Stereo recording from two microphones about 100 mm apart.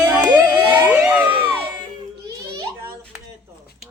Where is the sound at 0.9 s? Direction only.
15° right (ahead or behind).